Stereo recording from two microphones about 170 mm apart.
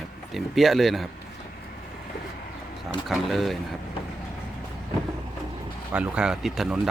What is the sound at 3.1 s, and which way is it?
Speech, centre (ahead or behind).